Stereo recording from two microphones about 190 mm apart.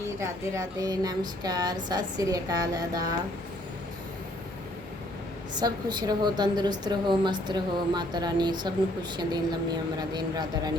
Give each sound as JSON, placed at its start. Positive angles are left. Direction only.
{"t": 0.2, "sound": "a woman's voice", "side_deg": -15}
{"t": 5.5, "sound": "a woman's voice", "side_deg": -20}